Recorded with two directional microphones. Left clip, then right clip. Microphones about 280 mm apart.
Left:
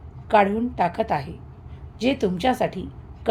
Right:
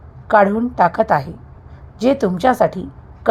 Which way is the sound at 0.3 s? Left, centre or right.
Centre.